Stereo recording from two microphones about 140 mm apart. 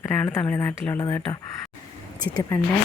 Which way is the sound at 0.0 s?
15° left (ahead or behind).